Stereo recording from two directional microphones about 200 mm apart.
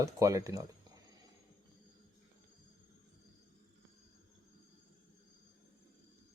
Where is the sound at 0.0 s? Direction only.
15° right (ahead or behind).